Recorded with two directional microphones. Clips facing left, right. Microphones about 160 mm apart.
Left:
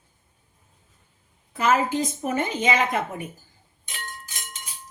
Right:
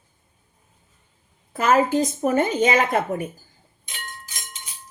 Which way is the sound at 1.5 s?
45° right (ahead or behind).